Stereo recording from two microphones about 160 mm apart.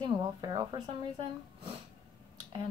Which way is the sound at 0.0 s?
30° right (ahead or behind).